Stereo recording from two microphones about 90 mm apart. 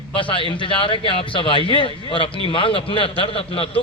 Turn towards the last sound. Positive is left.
turn(degrees=90)